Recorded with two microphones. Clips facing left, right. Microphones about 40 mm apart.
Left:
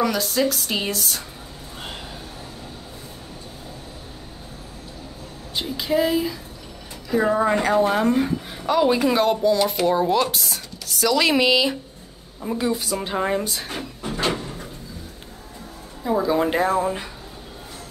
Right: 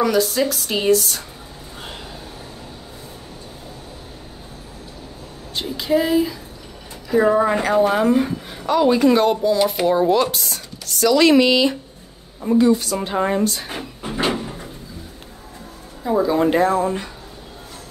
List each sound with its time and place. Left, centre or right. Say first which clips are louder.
0.0 s a woman's voice: right 3 dB; centre
5.6 s a woman's voice: right 2 dB; centre
13.7 s a sound: right 1 dB; centre
16.0 s a woman's voice: right 3 dB; centre